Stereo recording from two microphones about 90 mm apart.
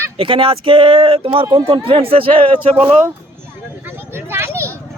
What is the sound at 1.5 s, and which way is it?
Speech, 90° right.